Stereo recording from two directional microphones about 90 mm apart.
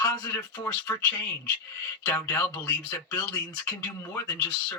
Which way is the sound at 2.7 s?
25° left (ahead or behind).